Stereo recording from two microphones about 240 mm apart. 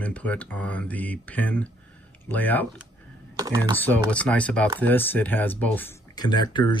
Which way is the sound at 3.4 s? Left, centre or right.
Centre.